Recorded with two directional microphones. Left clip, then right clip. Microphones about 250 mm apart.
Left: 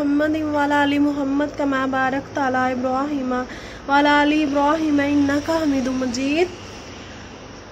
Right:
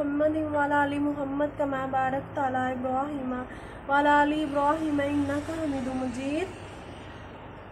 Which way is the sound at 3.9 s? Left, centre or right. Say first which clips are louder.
Left 6 dB; left.